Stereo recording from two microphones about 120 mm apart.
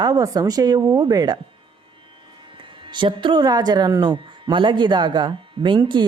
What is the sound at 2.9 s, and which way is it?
Speech, 40° right (ahead or behind).